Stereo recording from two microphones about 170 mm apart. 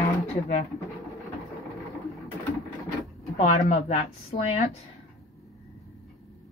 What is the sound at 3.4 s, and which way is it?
Speech, 40° left (ahead or behind).